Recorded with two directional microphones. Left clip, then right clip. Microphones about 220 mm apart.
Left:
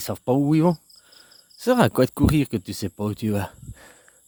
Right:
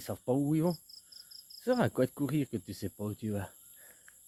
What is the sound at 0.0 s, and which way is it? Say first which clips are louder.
Speech: left 10 dB; 50° left (ahead or behind).